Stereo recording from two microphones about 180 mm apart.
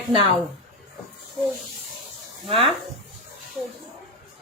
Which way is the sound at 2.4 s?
30° right (ahead or behind).